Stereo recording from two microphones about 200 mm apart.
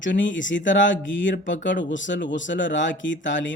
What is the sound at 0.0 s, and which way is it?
Speech, 65° left (ahead or behind).